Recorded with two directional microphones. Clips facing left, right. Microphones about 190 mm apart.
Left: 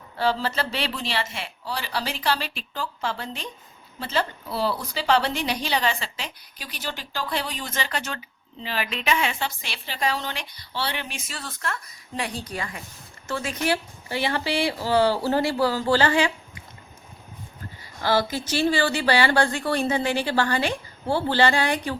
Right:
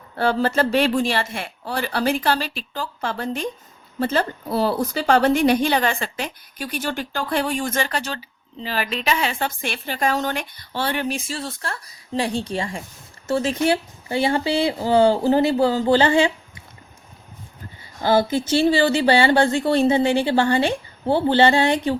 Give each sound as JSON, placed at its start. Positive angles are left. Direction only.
{"t": 0.2, "sound": "a woman's voice", "side_deg": -50}
{"t": 9.6, "sound": "a woman's voice", "side_deg": -50}
{"t": 11.2, "sound": "speech", "side_deg": -30}
{"t": 18.0, "sound": "speech", "side_deg": -25}